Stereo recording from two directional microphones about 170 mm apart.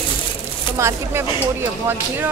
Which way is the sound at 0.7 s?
15° right (ahead or behind).